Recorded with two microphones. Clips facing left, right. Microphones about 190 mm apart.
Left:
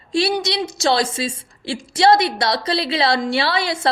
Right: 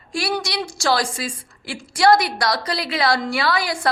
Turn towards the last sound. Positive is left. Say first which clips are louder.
# left 2 dB
turn(degrees=25)  # may be behind; listen again after turning